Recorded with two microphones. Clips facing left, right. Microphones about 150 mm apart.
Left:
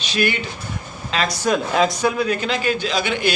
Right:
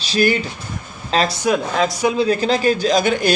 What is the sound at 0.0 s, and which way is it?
A man's voice, 35° right (ahead or behind).